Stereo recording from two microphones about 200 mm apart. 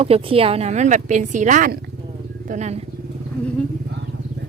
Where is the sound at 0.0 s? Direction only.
30° right (ahead or behind).